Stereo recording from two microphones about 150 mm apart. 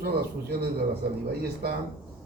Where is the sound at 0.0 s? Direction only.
90° right.